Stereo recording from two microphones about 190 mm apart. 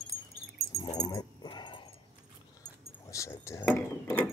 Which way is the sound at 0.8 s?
20° left (ahead or behind).